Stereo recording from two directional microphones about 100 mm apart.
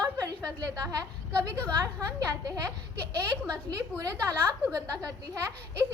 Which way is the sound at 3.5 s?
35° right (ahead or behind).